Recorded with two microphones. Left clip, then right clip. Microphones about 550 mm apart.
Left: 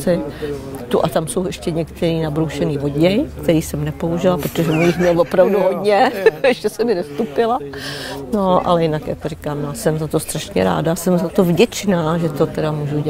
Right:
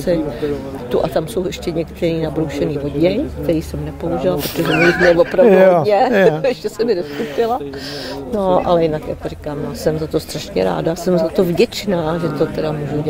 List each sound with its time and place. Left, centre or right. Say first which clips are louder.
0.0 s speech: right 1 dB; left
5.5 s speech: right 7 dB; right
5.9 s speech: right 1 dB; left